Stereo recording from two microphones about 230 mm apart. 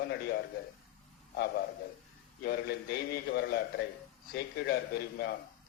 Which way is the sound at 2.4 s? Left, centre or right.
Left.